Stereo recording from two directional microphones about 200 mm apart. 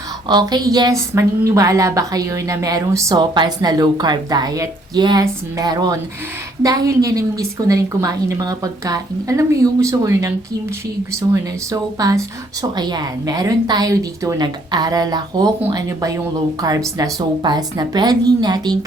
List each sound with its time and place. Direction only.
0.3 s a woman's voice: 20° right (ahead or behind)
11.7 s a woman's voice: 15° right (ahead or behind)